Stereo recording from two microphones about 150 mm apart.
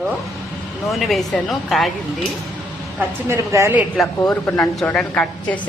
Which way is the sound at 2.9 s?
20° right (ahead or behind).